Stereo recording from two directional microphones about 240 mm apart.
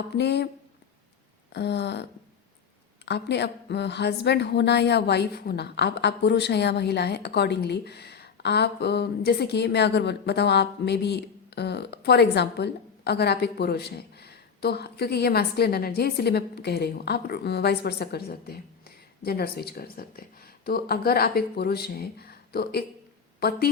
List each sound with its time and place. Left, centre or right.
0.1 s a woman's voice: left
1.5 s a woman's voice: left
3.1 s a woman's voice: left